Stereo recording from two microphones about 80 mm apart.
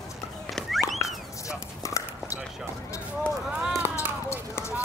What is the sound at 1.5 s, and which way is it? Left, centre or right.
Dog, left.